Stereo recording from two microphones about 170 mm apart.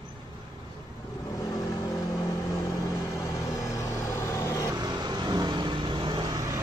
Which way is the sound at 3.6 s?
15° left (ahead or behind).